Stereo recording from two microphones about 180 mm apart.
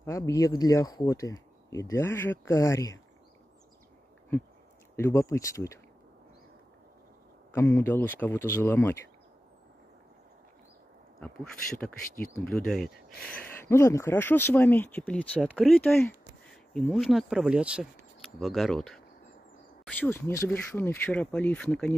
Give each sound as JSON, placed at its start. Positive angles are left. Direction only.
{"t": 0.0, "sound": "speech", "side_deg": 15}
{"t": 4.9, "sound": "speech", "side_deg": 15}
{"t": 7.5, "sound": "speech", "side_deg": 15}
{"t": 12.4, "sound": "speech", "side_deg": 5}